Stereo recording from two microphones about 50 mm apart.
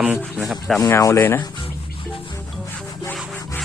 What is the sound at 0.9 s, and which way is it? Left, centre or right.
Rub, left.